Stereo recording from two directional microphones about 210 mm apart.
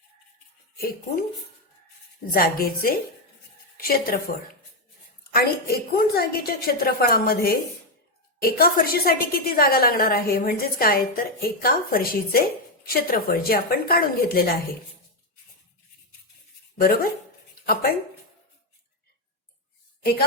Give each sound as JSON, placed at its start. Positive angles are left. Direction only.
{"t": 0.8, "sound": "a woman's voice", "side_deg": 45}
{"t": 2.3, "sound": "a woman's voice", "side_deg": 45}
{"t": 5.3, "sound": "a woman's voice", "side_deg": 45}
{"t": 16.8, "sound": "a woman's voice", "side_deg": 45}